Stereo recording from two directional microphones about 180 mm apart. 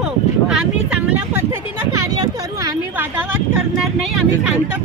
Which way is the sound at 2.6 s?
20° right (ahead or behind).